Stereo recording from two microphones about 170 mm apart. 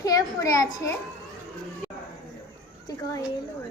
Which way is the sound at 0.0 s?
20° left (ahead or behind).